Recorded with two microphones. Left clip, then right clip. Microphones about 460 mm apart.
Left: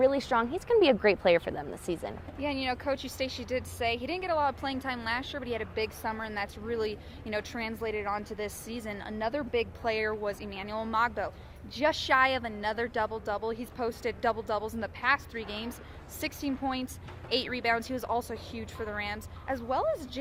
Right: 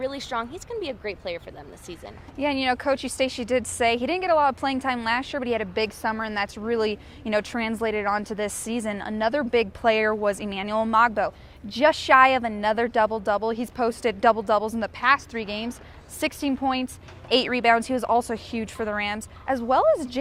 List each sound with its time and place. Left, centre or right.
0.0 s speech: left
2.4 s a woman's voice: right